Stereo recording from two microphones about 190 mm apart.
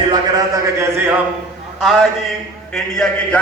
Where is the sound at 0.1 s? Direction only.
20° right (ahead or behind).